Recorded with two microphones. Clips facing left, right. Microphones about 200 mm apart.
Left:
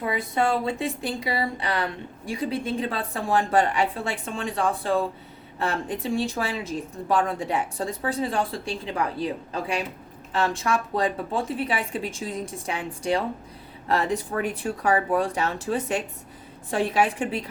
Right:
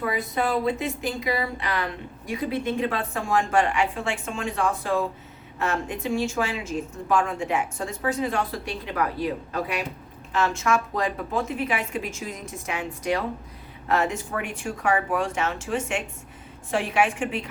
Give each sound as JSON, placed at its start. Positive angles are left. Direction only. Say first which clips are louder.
{"t": 0.0, "sound": "speech", "louder": "left 1 dB", "side_deg": 25}